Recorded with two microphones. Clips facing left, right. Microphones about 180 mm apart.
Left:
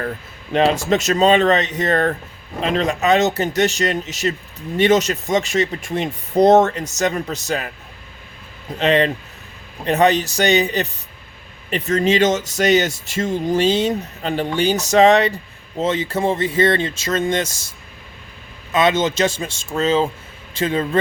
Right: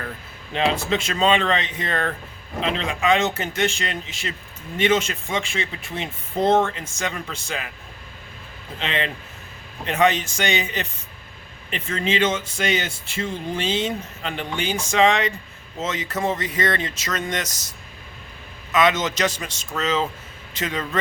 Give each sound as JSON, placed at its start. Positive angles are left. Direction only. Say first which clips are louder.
{"t": 0.5, "sound": "speech", "louder": "left 6 dB", "side_deg": 45}
{"t": 8.8, "sound": "speech", "louder": "left 10 dB", "side_deg": 40}
{"t": 18.7, "sound": "speech", "louder": "left 3 dB", "side_deg": 30}